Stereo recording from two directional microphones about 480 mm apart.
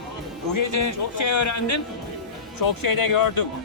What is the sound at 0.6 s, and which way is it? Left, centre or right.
Speech, left.